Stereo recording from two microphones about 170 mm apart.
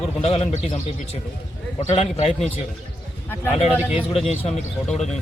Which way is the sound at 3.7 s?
10° right (ahead or behind).